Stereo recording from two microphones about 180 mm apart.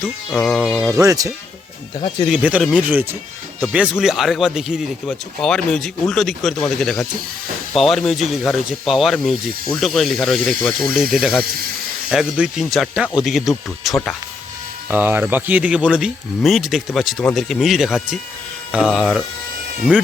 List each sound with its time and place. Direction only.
0.3 s speech: centre (ahead or behind)
0.9 s speech: 20° right (ahead or behind)
2.3 s speech: 5° right (ahead or behind)
14.8 s speech: 10° right (ahead or behind)